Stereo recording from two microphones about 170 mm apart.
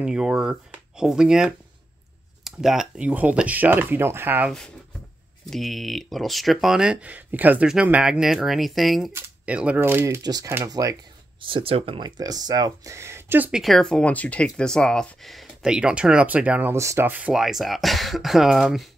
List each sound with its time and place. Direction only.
0.0 s speech: 5° right (ahead or behind)
5.4 s speech: centre (ahead or behind); by 11.0 s 20° right (ahead or behind)
11.4 s speech: 30° right (ahead or behind); by 18.9 s centre (ahead or behind)